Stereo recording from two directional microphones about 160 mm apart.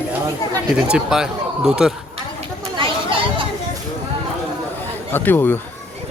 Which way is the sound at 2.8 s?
30° right (ahead or behind).